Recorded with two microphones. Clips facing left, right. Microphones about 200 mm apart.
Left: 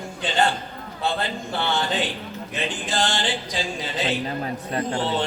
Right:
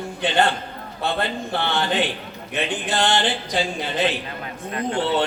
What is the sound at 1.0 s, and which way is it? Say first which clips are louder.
A man's voice: right 2 dB; 60° right (ahead or behind).